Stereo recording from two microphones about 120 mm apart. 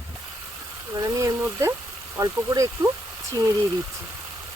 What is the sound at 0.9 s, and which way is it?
Speech, 30° right (ahead or behind).